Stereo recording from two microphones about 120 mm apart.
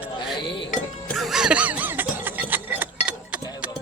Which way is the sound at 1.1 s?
Centre (ahead or behind).